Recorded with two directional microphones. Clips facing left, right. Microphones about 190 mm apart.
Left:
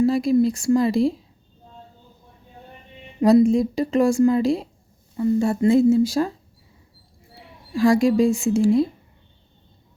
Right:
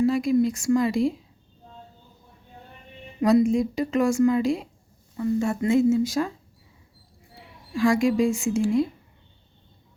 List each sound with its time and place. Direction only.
0.0 s speech: 35° left (ahead or behind)
3.2 s speech: 30° left (ahead or behind)
7.7 s speech: 35° left (ahead or behind)